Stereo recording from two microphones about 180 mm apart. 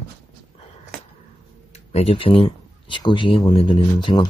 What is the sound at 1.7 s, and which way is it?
Speech, 35° left (ahead or behind).